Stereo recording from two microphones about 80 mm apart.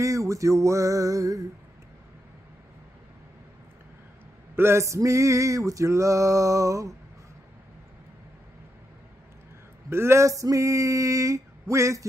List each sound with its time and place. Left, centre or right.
0.0 s male singing: right
4.6 s male singing: right
9.8 s male singing: right